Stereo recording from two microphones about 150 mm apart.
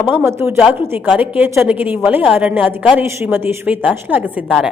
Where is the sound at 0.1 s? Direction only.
15° right (ahead or behind).